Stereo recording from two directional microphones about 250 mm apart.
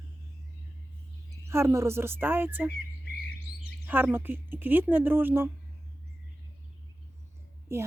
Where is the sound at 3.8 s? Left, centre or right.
Centre.